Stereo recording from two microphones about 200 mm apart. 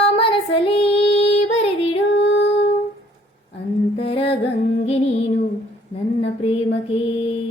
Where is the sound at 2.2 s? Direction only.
65° left (ahead or behind).